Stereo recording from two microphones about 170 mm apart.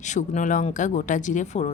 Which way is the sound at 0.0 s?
45° left (ahead or behind).